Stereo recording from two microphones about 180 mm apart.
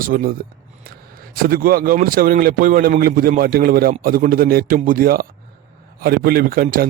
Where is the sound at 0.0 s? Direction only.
50° right (ahead or behind).